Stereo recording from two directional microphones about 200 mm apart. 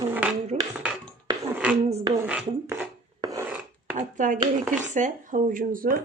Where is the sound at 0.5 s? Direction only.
30° right (ahead or behind).